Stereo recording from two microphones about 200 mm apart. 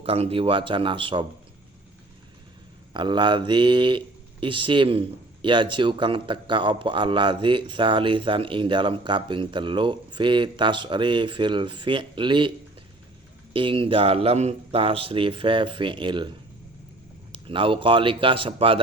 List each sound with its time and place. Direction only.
0.0 s speech: 30° right (ahead or behind)
2.9 s speech: 25° right (ahead or behind)
17.3 s speech: 25° right (ahead or behind)